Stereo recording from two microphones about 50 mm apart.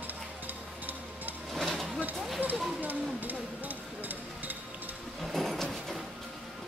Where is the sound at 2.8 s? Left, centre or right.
Right.